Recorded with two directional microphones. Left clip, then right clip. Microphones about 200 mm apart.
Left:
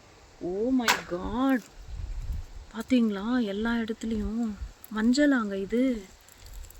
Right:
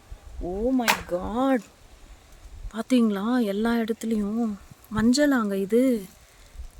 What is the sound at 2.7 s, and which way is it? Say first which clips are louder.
Speech: right 3 dB; 60° right (ahead or behind).